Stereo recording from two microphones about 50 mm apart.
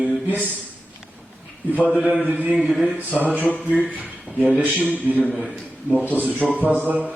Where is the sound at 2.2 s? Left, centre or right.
Right.